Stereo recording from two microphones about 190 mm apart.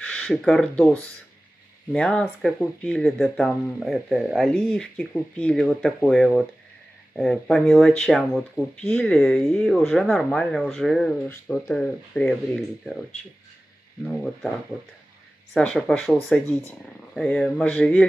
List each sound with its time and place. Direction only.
0.0 s speech: 5° left (ahead or behind)
14.0 s speech: centre (ahead or behind)
15.5 s speech: centre (ahead or behind)